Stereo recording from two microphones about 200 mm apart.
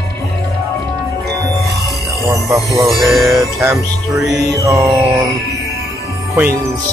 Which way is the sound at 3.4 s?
10° right (ahead or behind).